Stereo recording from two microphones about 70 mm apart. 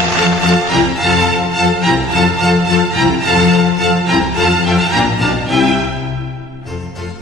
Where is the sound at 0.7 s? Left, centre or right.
Centre.